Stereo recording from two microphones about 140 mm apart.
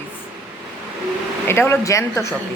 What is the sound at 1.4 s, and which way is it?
Speech, 15° left (ahead or behind).